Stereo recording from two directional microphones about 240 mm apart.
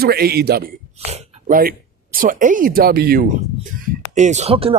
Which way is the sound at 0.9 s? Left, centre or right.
Right.